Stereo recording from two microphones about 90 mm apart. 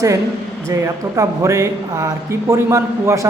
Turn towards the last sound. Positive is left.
turn(degrees=-35)  # may be behind; listen again after turning